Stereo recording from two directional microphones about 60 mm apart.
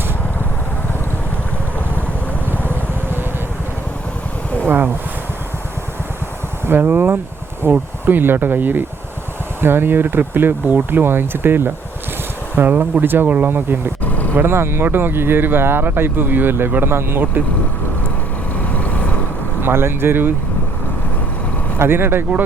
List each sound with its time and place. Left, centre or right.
2.5 s vehicle: right
4.6 s speech: right
6.7 s a sound: right
7.7 s speech: right
19.6 s speech: right
21.8 s speech: right